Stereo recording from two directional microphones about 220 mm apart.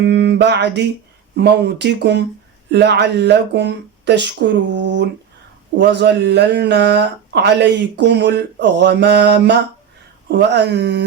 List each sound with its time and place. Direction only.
0.0 s mantra: 50° right (ahead or behind)
1.4 s speech: 50° right (ahead or behind)